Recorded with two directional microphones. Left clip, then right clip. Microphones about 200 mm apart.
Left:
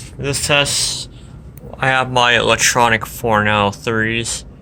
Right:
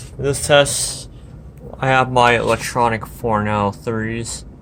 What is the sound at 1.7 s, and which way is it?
Speech, 10° right (ahead or behind).